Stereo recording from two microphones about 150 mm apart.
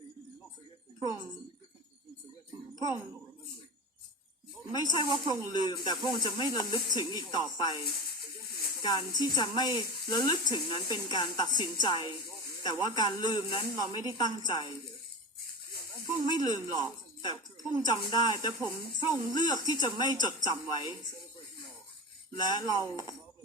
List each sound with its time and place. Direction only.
4.7 s speech: 30° left (ahead or behind)
8.8 s speech: 30° left (ahead or behind)
16.3 s speech: 30° left (ahead or behind)
22.4 s speech: 30° left (ahead or behind)